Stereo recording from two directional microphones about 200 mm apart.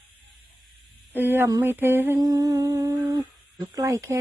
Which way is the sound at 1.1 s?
10° right (ahead or behind).